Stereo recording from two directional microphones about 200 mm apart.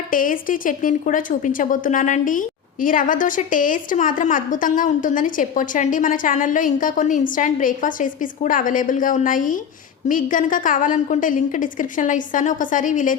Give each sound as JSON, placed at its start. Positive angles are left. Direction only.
{"t": 0.1, "sound": "a woman's voice", "side_deg": 45}